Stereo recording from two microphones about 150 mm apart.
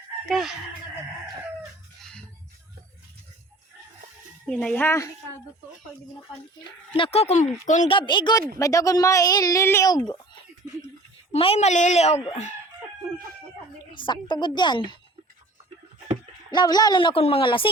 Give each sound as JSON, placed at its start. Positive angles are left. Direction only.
{"t": 0.3, "sound": "speech", "side_deg": 0}
{"t": 2.0, "sound": "music", "side_deg": 5}
{"t": 4.4, "sound": "speech", "side_deg": 5}
{"t": 6.9, "sound": "a woman's voice", "side_deg": 40}
{"t": 7.9, "sound": "a woman's voice", "side_deg": 35}
{"t": 11.3, "sound": "a woman's voice", "side_deg": 40}
{"t": 13.9, "sound": "a woman's voice", "side_deg": 30}
{"t": 16.5, "sound": "a woman's voice", "side_deg": 30}